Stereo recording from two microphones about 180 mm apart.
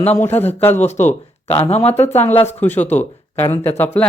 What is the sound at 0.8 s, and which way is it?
Speech, 40° left (ahead or behind).